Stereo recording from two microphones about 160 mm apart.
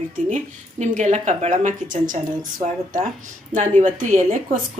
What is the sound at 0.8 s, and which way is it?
Speech, 50° right (ahead or behind).